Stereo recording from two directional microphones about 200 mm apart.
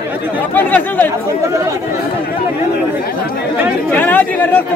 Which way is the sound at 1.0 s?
15° right (ahead or behind).